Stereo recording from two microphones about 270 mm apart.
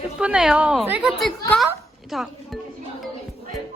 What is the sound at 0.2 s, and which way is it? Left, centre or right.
Speech, centre.